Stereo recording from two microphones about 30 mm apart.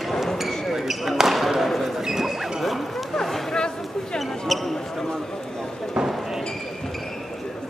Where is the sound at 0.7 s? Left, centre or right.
Centre.